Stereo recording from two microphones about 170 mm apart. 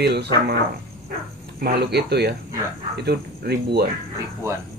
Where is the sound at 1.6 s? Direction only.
70° right (ahead or behind).